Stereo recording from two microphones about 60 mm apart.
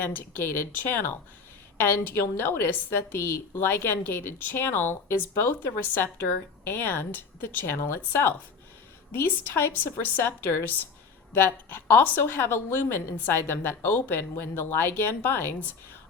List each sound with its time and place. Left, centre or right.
0.0 s a woman's voice: left